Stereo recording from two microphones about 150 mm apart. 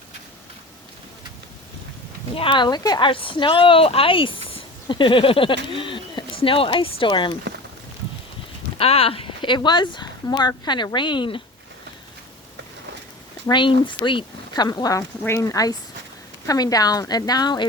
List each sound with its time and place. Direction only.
2.3 s speech: 35° left (ahead or behind)
8.8 s speech: 40° left (ahead or behind)
13.5 s speech: 30° left (ahead or behind)